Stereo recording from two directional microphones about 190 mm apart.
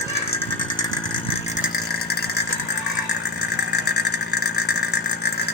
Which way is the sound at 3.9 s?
55° left (ahead or behind).